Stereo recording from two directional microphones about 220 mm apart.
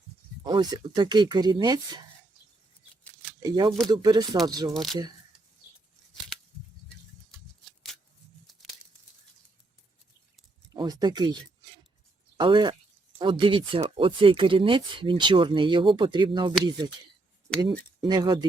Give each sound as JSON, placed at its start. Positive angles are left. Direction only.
{"t": 0.4, "sound": "speech", "side_deg": -20}
{"t": 3.0, "sound": "a sound", "side_deg": 5}
{"t": 3.4, "sound": "speech", "side_deg": -20}
{"t": 4.7, "sound": "speech", "side_deg": 0}
{"t": 10.8, "sound": "speech", "side_deg": -20}
{"t": 12.4, "sound": "speech", "side_deg": -20}